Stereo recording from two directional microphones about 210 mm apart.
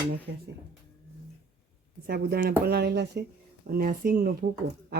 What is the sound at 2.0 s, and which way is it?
Cutlery, 45° right (ahead or behind).